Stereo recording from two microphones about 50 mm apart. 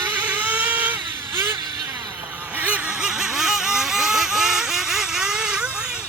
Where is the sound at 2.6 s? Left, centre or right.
Right.